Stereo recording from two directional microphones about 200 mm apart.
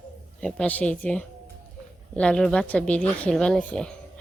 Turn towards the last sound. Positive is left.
turn(degrees=5)  # may be behind; listen again after turning